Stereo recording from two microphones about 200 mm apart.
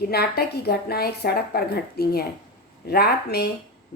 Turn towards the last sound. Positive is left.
turn(degrees=55)  # may be behind; listen again after turning